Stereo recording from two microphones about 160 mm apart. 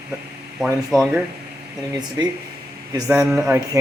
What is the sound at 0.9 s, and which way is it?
Speech, centre (ahead or behind).